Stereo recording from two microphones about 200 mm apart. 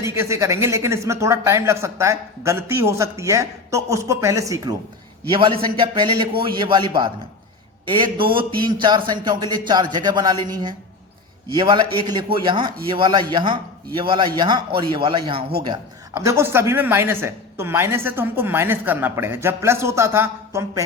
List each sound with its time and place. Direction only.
0.0 s speech: 15° right (ahead or behind)